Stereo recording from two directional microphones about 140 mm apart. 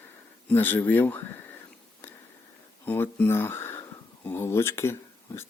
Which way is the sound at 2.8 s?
15° left (ahead or behind).